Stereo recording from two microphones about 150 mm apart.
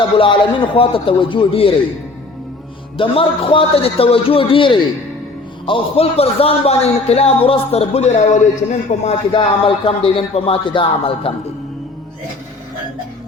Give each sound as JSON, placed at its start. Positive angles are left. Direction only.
{"t": 0.2, "sound": "speech", "side_deg": 35}
{"t": 3.0, "sound": "a man's voice", "side_deg": 35}
{"t": 9.4, "sound": "speech", "side_deg": 35}